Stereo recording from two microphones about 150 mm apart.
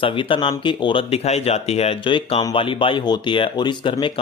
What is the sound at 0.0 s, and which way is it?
Speech, 35° left (ahead or behind).